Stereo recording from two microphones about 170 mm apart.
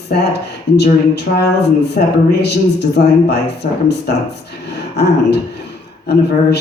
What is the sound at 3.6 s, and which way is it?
Speech, 55° left (ahead or behind).